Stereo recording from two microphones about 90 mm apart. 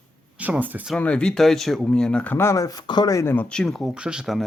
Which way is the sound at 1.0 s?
10° left (ahead or behind).